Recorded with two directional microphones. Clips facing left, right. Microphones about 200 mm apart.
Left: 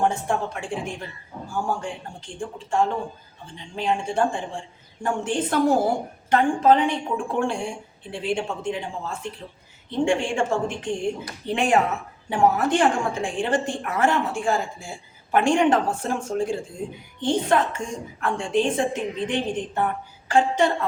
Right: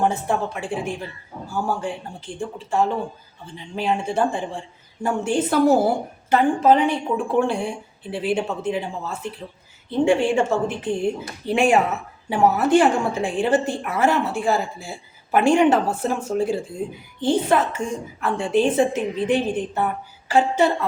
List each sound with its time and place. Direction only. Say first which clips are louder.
0.0 s a woman's voice: right 2 dB; 5° right (ahead or behind)